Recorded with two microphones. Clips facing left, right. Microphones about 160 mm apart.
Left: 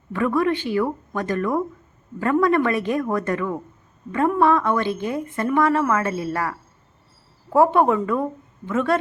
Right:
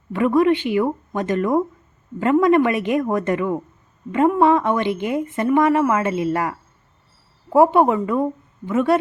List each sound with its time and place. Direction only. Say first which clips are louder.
0.1 s a woman's voice: right 4 dB; 15° right (ahead or behind)
7.5 s a woman's voice: right 2 dB; 15° right (ahead or behind)